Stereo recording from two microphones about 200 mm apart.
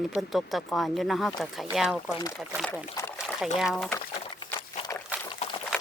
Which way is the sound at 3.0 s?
15° left (ahead or behind).